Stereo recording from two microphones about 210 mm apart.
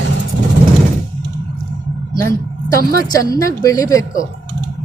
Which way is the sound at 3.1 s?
15° left (ahead or behind).